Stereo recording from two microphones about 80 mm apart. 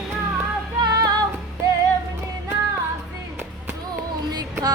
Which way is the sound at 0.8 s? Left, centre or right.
Right.